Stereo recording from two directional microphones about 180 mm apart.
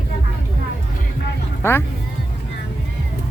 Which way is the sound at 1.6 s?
15° left (ahead or behind).